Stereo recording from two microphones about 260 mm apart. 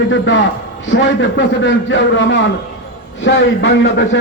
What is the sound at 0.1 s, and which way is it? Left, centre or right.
A man's voice, left.